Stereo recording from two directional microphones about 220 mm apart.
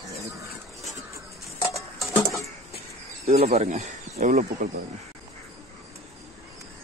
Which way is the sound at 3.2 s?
30° right (ahead or behind).